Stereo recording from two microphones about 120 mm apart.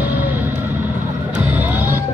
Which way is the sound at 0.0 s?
15° right (ahead or behind).